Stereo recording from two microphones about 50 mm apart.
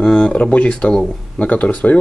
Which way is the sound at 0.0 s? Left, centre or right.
Centre.